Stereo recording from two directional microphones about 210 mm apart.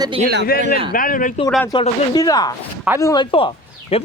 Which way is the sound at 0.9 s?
40° left (ahead or behind).